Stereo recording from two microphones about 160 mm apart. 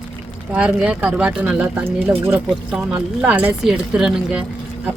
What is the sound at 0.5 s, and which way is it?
Speech, 10° right (ahead or behind).